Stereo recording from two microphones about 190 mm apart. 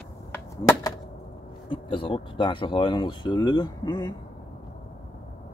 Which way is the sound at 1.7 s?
25° left (ahead or behind).